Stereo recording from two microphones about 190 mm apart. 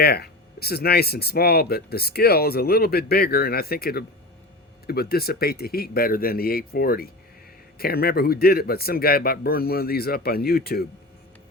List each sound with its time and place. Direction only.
0.0 s speech: 55° left (ahead or behind)